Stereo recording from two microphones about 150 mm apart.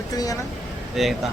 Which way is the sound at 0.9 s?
Centre (ahead or behind).